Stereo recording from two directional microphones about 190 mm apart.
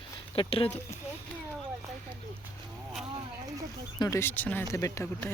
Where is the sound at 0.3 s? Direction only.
30° left (ahead or behind).